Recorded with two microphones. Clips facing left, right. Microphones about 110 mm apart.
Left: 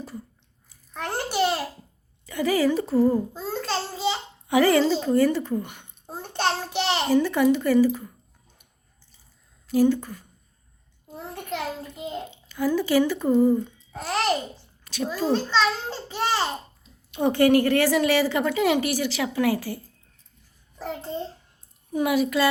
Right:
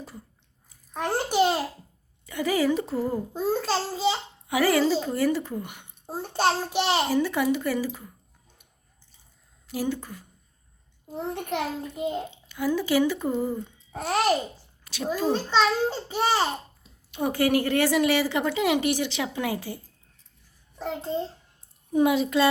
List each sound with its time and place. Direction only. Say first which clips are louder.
0.9 s a child's voice: right 3 dB; 15° right (ahead or behind)
9.6 s a child's voice: left 9 dB; 15° right (ahead or behind)
20.8 s a child's voice: right 2 dB; centre (ahead or behind)
21.9 s a woman's voice: right 1 dB; 25° right (ahead or behind)